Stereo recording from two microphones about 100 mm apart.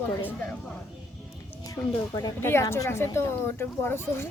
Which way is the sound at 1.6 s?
35° left (ahead or behind).